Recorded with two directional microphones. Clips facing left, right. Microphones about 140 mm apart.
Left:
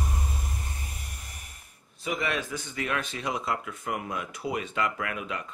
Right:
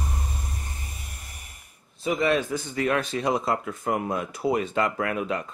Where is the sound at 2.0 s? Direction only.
35° right (ahead or behind).